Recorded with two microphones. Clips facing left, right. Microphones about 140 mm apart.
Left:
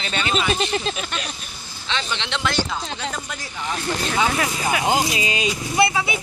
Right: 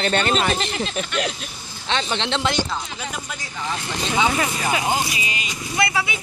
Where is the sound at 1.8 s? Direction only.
50° right (ahead or behind).